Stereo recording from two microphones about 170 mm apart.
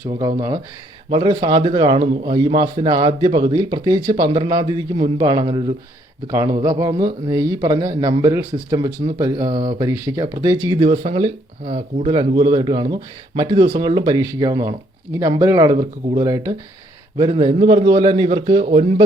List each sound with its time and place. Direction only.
0.2 s speech: 25° right (ahead or behind)
10.8 s a man's voice: 35° right (ahead or behind)